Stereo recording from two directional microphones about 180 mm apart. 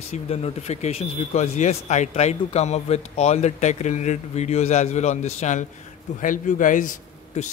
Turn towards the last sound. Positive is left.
turn(degrees=45)  # may be behind; listen again after turning